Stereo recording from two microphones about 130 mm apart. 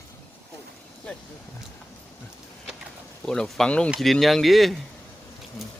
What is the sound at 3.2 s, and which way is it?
Speech, 5° left (ahead or behind).